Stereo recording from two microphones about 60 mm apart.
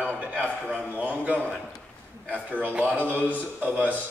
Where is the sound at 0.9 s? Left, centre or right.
Right.